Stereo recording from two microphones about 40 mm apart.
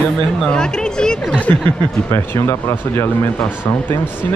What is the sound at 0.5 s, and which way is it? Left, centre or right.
Speech, centre.